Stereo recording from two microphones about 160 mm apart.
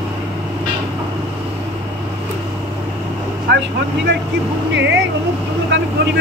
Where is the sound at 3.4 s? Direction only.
90° right.